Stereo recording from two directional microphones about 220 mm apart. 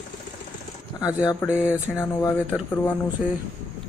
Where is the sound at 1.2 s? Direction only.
20° left (ahead or behind).